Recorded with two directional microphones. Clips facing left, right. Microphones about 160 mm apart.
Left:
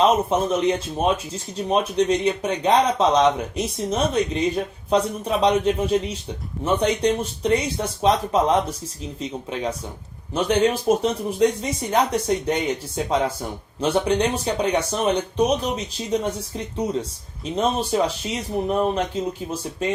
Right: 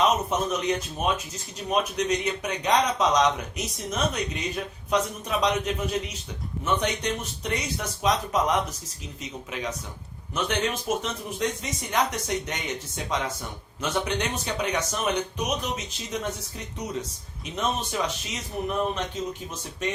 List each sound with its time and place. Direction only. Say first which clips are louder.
0.0 s speech: left 5 dB; 30° left (ahead or behind)
17.5 s speech: left 7 dB; 30° left (ahead or behind)